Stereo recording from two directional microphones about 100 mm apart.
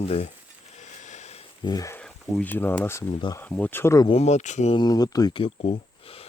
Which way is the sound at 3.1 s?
55° left (ahead or behind).